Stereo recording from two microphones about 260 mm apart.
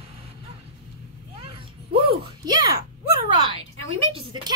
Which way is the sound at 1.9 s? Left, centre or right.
Centre.